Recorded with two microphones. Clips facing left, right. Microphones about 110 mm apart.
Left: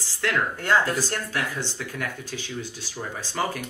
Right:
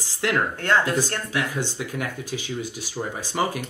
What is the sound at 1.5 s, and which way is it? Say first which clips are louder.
Speech: right 3 dB; 15° right (ahead or behind).